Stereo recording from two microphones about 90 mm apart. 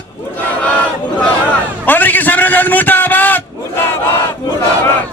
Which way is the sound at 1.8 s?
20° left (ahead or behind).